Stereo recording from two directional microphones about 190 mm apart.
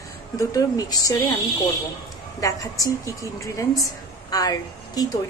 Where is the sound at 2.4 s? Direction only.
15° left (ahead or behind).